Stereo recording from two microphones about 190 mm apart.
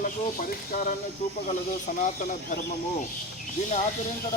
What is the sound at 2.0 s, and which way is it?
Speech, 45° left (ahead or behind).